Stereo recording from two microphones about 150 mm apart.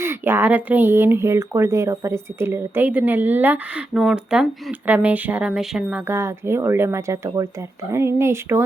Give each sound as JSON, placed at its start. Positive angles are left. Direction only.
{"t": 0.0, "sound": "speech", "side_deg": -15}
{"t": 6.1, "sound": "speech", "side_deg": -15}